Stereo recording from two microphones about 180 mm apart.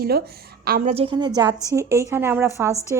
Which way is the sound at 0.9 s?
30° right (ahead or behind).